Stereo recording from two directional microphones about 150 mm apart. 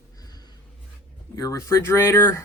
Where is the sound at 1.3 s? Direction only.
20° left (ahead or behind).